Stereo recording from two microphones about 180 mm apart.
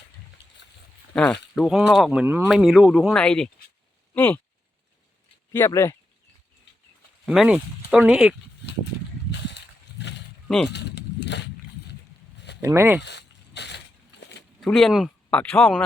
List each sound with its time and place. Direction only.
1.1 s speech: 5° left (ahead or behind)
5.5 s speech: 15° left (ahead or behind)
7.3 s speech: 5° right (ahead or behind)
9.5 s a sound: 70° left (ahead or behind)
12.6 s speech: 15° right (ahead or behind)
13.0 s a sound: 70° left (ahead or behind)
14.6 s speech: centre (ahead or behind)